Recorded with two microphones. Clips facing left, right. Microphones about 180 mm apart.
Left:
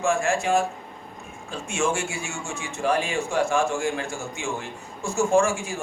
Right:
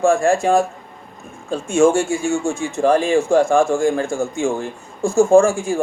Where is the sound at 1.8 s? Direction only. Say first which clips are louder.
Right 11 dB; 50° right (ahead or behind).